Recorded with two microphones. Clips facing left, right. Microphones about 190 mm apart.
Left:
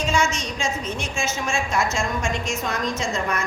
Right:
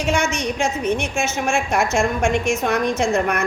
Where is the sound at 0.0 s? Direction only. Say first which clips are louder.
Right 3 dB; 65° right (ahead or behind).